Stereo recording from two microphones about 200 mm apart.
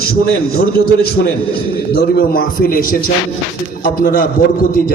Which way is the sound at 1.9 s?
55° left (ahead or behind).